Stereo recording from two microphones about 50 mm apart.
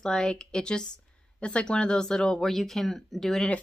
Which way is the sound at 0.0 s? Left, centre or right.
Centre.